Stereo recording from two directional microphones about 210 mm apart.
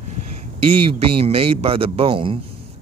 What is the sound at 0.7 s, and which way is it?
Speech, 25° right (ahead or behind).